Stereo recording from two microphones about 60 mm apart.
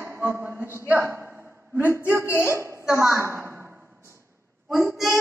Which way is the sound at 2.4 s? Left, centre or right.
Right.